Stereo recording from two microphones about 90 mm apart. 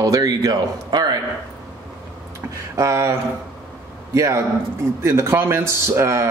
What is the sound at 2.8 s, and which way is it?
Speech, 35° right (ahead or behind).